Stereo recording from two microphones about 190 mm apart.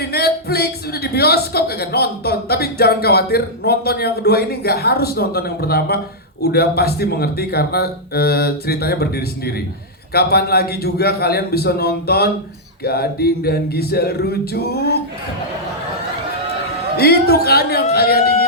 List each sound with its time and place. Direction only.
0.0 s speech: 55° left (ahead or behind)
17.0 s speech: 55° left (ahead or behind)